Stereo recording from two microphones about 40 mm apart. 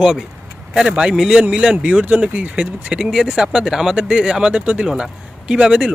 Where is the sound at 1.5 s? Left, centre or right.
Right.